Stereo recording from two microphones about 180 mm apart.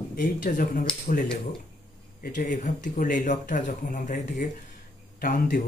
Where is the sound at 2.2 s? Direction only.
45° left (ahead or behind).